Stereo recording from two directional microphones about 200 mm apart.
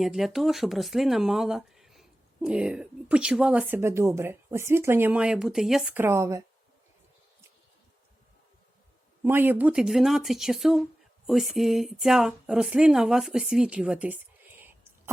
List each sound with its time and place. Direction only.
0.0 s speech: centre (ahead or behind)
9.2 s speech: 10° right (ahead or behind)